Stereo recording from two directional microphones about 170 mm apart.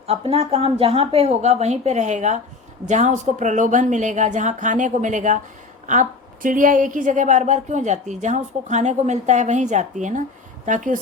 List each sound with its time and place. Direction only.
0.1 s a woman's voice: 35° right (ahead or behind)